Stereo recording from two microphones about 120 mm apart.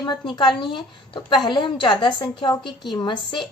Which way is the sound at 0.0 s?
40° left (ahead or behind).